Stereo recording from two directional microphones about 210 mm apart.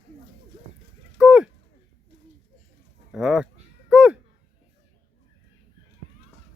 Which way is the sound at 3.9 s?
5° right (ahead or behind).